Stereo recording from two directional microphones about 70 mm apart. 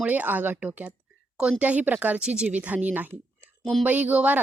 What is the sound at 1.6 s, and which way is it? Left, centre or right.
Speech, right.